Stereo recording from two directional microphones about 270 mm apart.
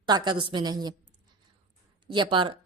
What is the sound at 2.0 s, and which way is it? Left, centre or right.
Speech, centre.